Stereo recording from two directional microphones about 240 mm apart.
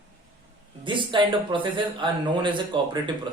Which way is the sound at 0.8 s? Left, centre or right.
Centre.